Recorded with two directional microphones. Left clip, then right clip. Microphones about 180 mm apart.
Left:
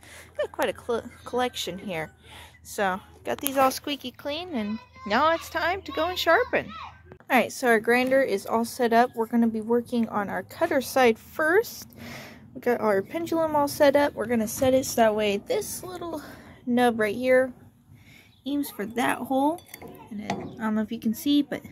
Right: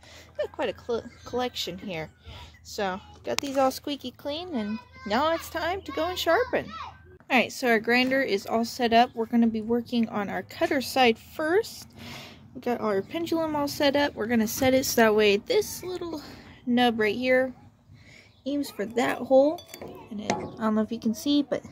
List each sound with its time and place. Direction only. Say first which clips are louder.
0.4 s speech: left 2 dB; centre (ahead or behind)
3.5 s a woman's voice: left 3 dB; 15° right (ahead or behind); by 13.0 s centre (ahead or behind)
13.1 s a woman's voice: left 3 dB; 15° right (ahead or behind)
14.1 s a woman's voice: even; 20° right (ahead or behind)
14.6 s a woman's voice: left 1 dB; 35° right (ahead or behind); by 17.5 s 15° right (ahead or behind)
18.4 s speech: even; centre (ahead or behind)
20.2 s a woman's voice: right 3 dB; 15° right (ahead or behind)
21.0 s speech: left 5 dB; centre (ahead or behind)